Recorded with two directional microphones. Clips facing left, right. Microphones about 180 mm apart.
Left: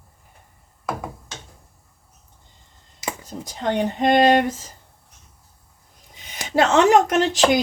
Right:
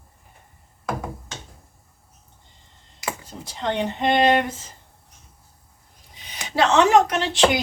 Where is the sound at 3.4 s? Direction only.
45° left (ahead or behind).